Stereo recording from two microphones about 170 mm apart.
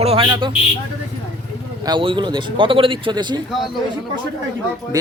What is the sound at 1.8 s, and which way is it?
Speech, 30° right (ahead or behind).